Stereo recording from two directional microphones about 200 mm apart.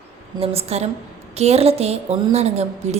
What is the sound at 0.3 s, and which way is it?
A woman's voice, 30° right (ahead or behind).